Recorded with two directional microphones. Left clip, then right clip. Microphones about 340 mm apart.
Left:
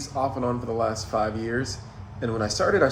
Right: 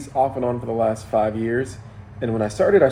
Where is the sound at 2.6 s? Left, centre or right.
Right.